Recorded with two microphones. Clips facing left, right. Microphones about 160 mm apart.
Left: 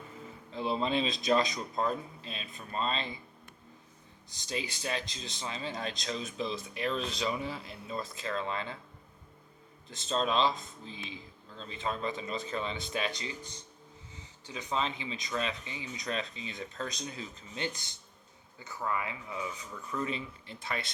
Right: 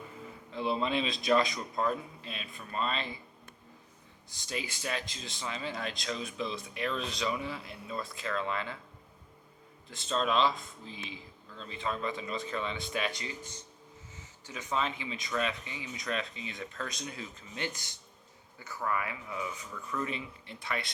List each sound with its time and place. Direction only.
0.5 s speech: 35° left (ahead or behind)
1.2 s speech: 20° left (ahead or behind)
4.4 s speech: 30° left (ahead or behind)
10.1 s speech: 30° left (ahead or behind)
14.7 s speech: 30° left (ahead or behind)